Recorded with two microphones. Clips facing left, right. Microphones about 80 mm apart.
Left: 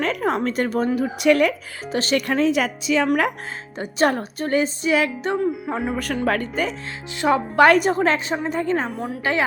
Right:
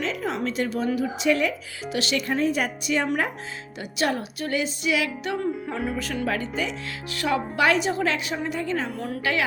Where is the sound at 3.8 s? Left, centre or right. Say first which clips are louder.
Left 6 dB; left.